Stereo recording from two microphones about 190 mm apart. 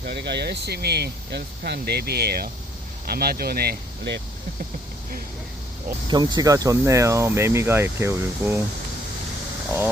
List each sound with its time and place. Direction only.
0.0 s speech: 60° right (ahead or behind)
6.1 s speech: 20° right (ahead or behind)